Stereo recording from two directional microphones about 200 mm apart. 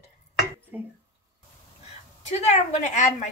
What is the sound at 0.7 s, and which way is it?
Speech, 10° right (ahead or behind).